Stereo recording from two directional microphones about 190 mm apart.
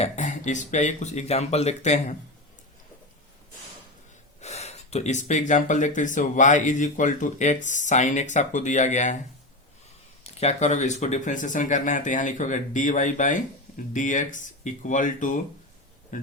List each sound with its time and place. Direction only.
0.0 s speech: 40° left (ahead or behind)
4.4 s speech: 35° left (ahead or behind)
10.2 s speech: 35° left (ahead or behind)